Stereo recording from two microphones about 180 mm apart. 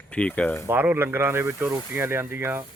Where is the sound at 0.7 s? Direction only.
10° right (ahead or behind).